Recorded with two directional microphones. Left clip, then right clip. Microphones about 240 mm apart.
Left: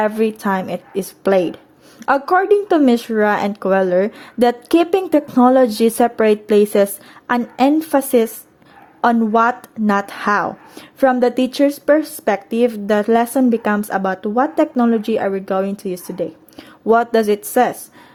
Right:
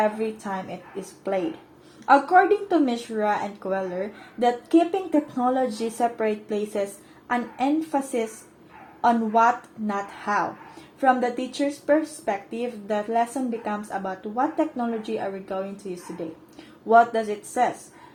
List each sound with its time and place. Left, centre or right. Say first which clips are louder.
0.0 s speech: left 7 dB; left
2.0 s speech: left 2 dB; left
16.8 s speech: left 4 dB; left